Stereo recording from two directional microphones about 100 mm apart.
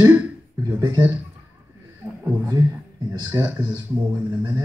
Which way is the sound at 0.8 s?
25° right (ahead or behind).